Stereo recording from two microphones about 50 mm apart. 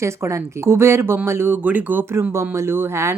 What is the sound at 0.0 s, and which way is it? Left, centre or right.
Speech, right.